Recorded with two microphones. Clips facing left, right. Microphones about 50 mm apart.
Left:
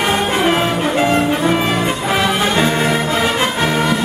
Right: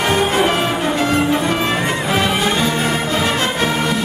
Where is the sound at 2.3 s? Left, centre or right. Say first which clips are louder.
Left 2 dB; left.